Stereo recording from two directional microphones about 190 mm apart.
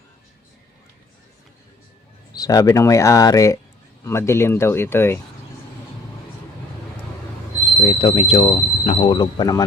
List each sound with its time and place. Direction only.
2.3 s speech: 20° left (ahead or behind)
7.9 s speech: 30° left (ahead or behind)